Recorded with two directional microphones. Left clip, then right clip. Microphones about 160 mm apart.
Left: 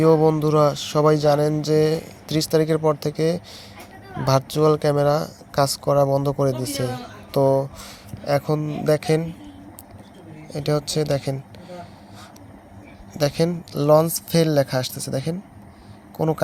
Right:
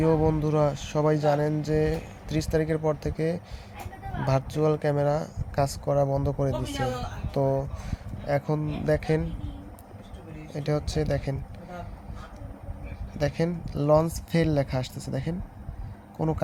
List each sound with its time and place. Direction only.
0.0 s speech: 25° left (ahead or behind)
10.5 s speech: 20° left (ahead or behind)
13.1 s speech: 25° left (ahead or behind)